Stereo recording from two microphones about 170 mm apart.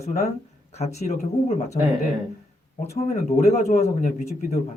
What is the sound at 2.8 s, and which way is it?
Speech, 40° left (ahead or behind).